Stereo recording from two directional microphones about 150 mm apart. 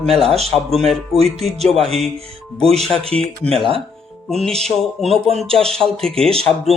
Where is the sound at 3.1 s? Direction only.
5° left (ahead or behind).